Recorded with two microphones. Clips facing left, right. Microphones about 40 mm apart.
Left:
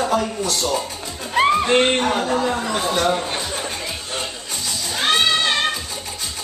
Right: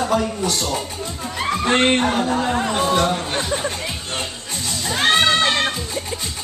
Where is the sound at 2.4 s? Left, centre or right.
Right.